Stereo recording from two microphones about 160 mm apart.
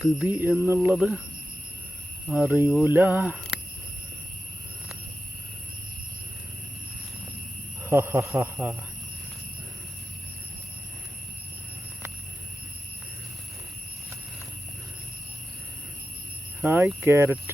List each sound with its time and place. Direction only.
0.3 s a man's voice: 15° right (ahead or behind)
0.9 s speech: centre (ahead or behind)
2.3 s a man's voice: 15° right (ahead or behind)
7.9 s a man's voice: 15° right (ahead or behind)
16.6 s a man's voice: 15° right (ahead or behind)